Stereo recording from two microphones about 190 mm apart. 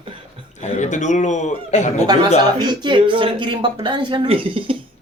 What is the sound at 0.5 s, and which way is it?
Speech, 35° left (ahead or behind).